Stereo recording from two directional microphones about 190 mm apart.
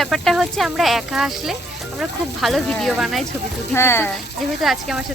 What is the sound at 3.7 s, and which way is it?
Speech, 10° left (ahead or behind).